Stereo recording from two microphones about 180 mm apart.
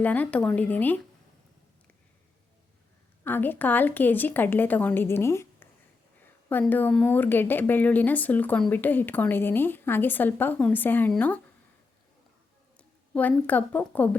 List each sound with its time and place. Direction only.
0.0 s a woman's voice: 10° left (ahead or behind)
3.2 s a woman's voice: 10° left (ahead or behind)
13.1 s a woman's voice: 10° left (ahead or behind)